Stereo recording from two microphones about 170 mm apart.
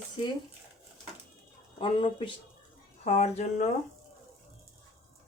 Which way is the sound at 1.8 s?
30° left (ahead or behind).